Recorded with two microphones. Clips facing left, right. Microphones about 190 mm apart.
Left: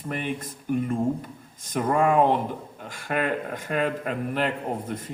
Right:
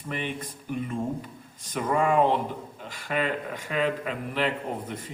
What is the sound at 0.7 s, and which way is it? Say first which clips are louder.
Speech: left 5 dB; 45° left (ahead or behind).